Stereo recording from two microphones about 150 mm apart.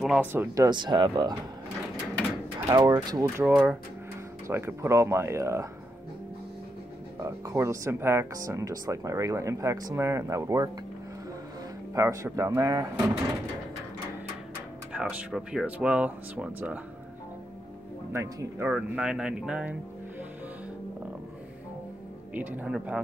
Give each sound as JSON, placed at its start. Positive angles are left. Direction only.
{"t": 0.0, "sound": "speech", "side_deg": -5}
{"t": 0.3, "sound": "speech", "side_deg": -15}
{"t": 0.7, "sound": "speech", "side_deg": -30}
{"t": 2.7, "sound": "speech", "side_deg": -25}
{"t": 7.2, "sound": "speech", "side_deg": -20}
{"t": 11.9, "sound": "speech", "side_deg": -20}
{"t": 14.9, "sound": "speech", "side_deg": -5}
{"t": 18.1, "sound": "speech", "side_deg": -20}
{"t": 18.7, "sound": "speech", "side_deg": -5}
{"t": 22.3, "sound": "speech", "side_deg": -10}